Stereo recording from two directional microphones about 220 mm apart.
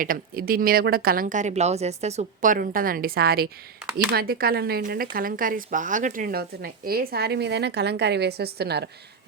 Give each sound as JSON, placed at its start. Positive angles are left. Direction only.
{"t": 0.0, "sound": "speech", "side_deg": -40}